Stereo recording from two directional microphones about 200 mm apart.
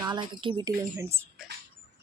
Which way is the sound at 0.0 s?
20° right (ahead or behind).